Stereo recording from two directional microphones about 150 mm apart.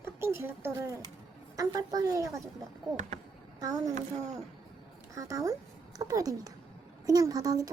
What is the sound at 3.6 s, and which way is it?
Speech, 25° right (ahead or behind).